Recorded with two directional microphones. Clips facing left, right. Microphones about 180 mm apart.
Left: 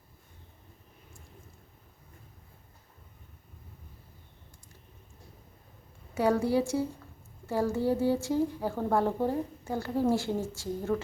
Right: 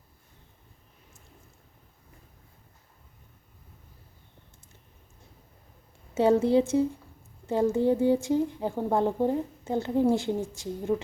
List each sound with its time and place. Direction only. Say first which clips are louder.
6.1 s a woman's voice: right 5 dB; 25° right (ahead or behind)